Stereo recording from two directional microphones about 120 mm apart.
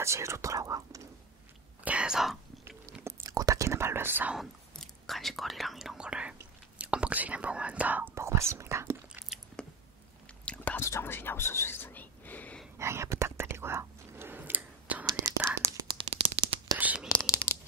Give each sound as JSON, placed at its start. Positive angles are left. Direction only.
{"t": 0.0, "sound": "speech", "side_deg": -25}
{"t": 1.9, "sound": "speech", "side_deg": -10}
{"t": 3.0, "sound": "whispering", "side_deg": -25}
{"t": 4.4, "sound": "whispering", "side_deg": 0}
{"t": 9.6, "sound": "a sound", "side_deg": 5}
{"t": 10.4, "sound": "whispering", "side_deg": 10}
{"t": 12.7, "sound": "whispering", "side_deg": -25}
{"t": 15.0, "sound": "whispering", "side_deg": -25}
{"t": 15.9, "sound": "a sound", "side_deg": -50}
{"t": 16.7, "sound": "whispering", "side_deg": -10}